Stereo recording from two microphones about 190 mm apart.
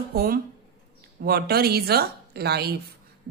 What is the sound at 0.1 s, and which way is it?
A woman's voice, 55° right (ahead or behind).